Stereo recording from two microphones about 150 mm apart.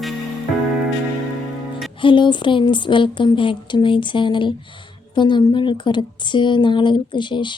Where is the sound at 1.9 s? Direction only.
35° left (ahead or behind).